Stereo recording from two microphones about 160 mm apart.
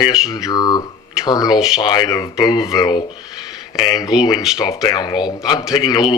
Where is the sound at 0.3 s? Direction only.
20° left (ahead or behind).